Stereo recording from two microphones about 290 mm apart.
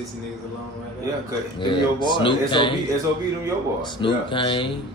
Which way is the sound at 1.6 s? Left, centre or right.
Centre.